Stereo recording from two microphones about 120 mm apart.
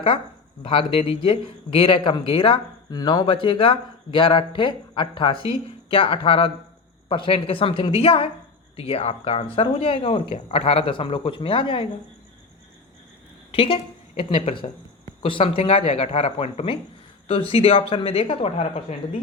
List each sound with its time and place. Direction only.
0.6 s speech: 50° left (ahead or behind)
2.9 s speech: 35° left (ahead or behind)
13.5 s a woman's voice: 50° left (ahead or behind)